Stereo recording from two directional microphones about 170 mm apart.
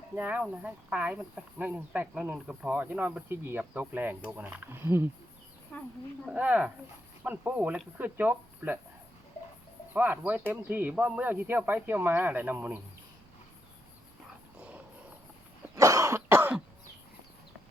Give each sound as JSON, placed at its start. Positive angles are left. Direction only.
{"t": 0.2, "sound": "speech", "side_deg": -10}
{"t": 5.7, "sound": "a woman's voice", "side_deg": 10}
{"t": 6.2, "sound": "speech", "side_deg": -10}
{"t": 9.9, "sound": "speech", "side_deg": -10}
{"t": 15.7, "sound": "cough", "side_deg": -20}